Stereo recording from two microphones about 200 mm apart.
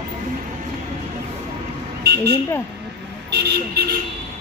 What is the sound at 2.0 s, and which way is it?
Vehicle, 55° right (ahead or behind).